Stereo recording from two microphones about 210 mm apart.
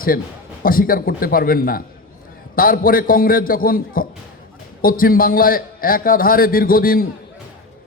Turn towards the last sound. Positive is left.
turn(degrees=45)  # may be behind; listen again after turning